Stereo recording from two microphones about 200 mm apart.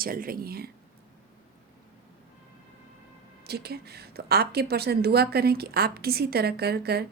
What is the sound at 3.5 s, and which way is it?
A woman's voice, 55° right (ahead or behind).